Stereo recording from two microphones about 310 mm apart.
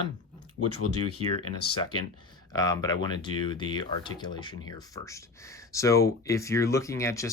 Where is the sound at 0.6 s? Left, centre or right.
Left.